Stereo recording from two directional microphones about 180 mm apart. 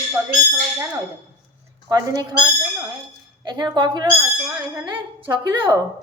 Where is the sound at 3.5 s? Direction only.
25° right (ahead or behind).